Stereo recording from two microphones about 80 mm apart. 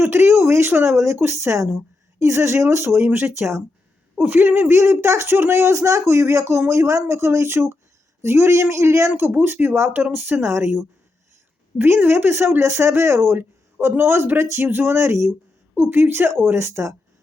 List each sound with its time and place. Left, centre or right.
0.0 s speech: right